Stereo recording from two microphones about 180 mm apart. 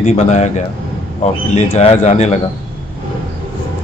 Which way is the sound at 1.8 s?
35° left (ahead or behind).